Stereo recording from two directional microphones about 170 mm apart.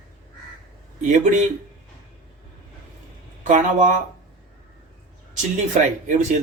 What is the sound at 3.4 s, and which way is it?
Speech, 45° right (ahead or behind).